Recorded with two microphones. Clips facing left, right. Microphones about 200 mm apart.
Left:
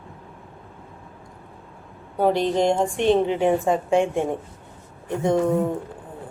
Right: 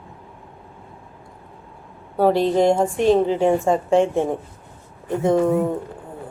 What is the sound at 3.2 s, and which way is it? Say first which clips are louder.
Speech: right 2 dB; 25° right (ahead or behind).